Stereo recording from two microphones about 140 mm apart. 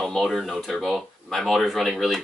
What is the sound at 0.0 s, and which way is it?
Speech, centre (ahead or behind).